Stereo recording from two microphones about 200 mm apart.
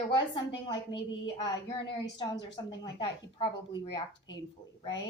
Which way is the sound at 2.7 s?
25° left (ahead or behind).